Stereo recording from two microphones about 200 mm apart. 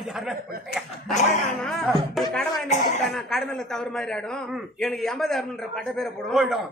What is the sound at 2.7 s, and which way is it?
Speech, 35° left (ahead or behind).